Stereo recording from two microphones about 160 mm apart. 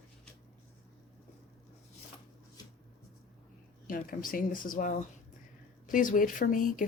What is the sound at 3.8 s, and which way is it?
Speech, 60° left (ahead or behind).